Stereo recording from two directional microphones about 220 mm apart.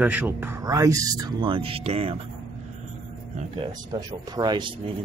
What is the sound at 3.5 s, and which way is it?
Speech, 20° right (ahead or behind).